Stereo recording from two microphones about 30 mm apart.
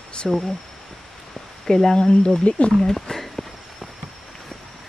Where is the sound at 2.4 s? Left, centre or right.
Left.